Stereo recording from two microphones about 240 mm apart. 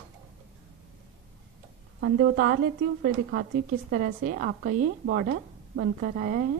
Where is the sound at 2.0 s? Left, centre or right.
Right.